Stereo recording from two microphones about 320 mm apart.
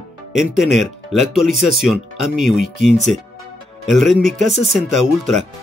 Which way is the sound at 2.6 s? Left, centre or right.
Left.